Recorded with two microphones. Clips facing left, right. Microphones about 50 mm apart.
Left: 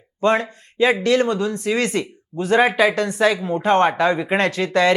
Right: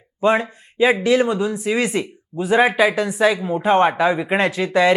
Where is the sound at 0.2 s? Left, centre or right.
Centre.